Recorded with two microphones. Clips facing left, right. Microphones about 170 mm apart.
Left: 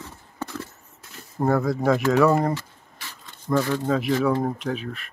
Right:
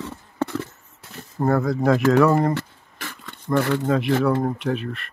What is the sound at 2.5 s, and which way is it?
Rub, 75° right (ahead or behind).